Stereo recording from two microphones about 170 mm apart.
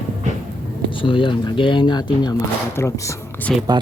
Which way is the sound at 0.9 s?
30° left (ahead or behind).